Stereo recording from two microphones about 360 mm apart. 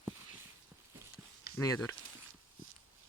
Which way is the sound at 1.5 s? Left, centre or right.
Centre.